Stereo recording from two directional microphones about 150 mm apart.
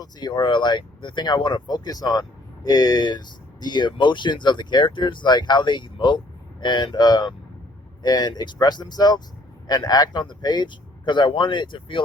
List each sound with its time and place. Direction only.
0.0 s speech: 30° left (ahead or behind)